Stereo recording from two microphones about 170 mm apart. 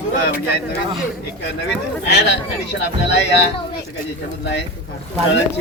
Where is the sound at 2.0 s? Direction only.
90° left.